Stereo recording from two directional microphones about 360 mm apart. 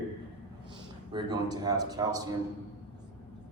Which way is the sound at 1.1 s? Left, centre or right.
Centre.